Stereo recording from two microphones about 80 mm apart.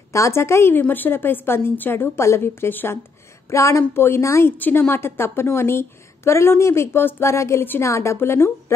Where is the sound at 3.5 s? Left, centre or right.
Left.